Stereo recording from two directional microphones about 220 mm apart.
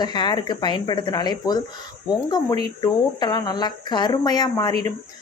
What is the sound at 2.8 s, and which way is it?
Speech, 20° left (ahead or behind).